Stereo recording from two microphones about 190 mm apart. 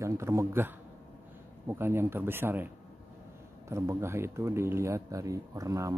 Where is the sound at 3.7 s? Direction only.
15° right (ahead or behind).